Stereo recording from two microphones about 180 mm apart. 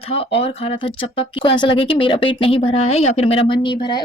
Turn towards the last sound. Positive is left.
turn(degrees=25)  # may be behind; listen again after turning